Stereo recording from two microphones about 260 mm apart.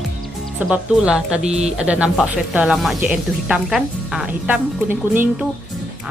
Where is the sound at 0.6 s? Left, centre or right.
Centre.